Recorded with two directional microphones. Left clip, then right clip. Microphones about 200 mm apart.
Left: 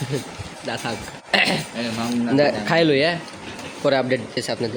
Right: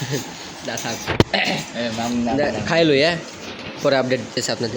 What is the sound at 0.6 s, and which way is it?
Speech, 15° left (ahead or behind).